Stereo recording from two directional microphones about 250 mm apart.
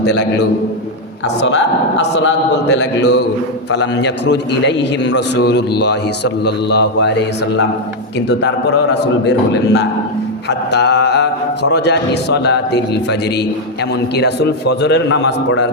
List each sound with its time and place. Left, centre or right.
0.0 s a man's voice: left